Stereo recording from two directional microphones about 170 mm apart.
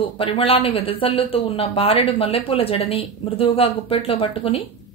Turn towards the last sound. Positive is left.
turn(degrees=30)  # may be behind; listen again after turning